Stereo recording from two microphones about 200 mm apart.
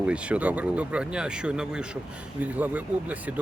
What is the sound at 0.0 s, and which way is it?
Speech, 5° right (ahead or behind).